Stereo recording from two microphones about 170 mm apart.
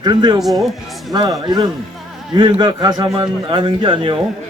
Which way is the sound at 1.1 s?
20° right (ahead or behind).